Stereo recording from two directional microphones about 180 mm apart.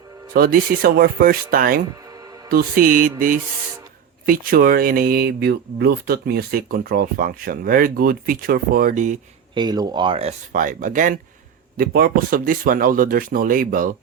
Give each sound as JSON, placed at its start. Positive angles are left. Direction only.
{"t": 0.3, "sound": "speech", "side_deg": -55}
{"t": 9.6, "sound": "speech", "side_deg": -20}
{"t": 10.5, "sound": "speech", "side_deg": -45}